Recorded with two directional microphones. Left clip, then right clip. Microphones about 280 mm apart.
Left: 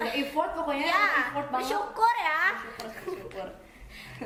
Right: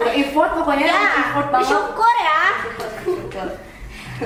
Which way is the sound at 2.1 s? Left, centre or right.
Left.